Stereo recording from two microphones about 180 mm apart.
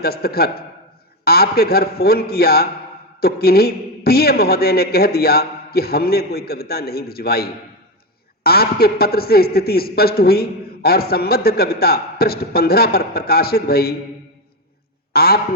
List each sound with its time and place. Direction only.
0.0 s a man's voice: 60° left (ahead or behind)
15.1 s a man's voice: 60° left (ahead or behind)